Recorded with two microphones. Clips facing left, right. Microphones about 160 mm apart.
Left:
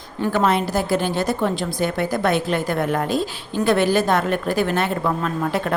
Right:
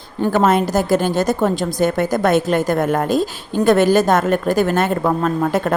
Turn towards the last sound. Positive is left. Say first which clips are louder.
# right 5 dB
turn(degrees=-45)  # may be behind; listen again after turning